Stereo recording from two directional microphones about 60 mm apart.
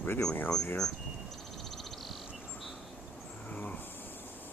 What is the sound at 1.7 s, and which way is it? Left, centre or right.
Frog, centre.